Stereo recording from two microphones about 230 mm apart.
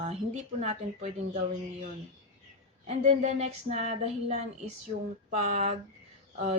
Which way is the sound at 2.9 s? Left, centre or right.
Right.